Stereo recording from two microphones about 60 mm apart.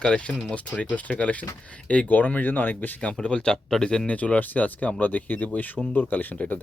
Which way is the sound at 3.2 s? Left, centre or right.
Centre.